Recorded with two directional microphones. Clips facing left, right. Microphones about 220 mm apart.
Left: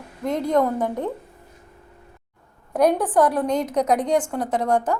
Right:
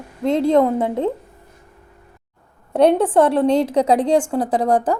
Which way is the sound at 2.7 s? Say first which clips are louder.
Right 4 dB; 25° right (ahead or behind).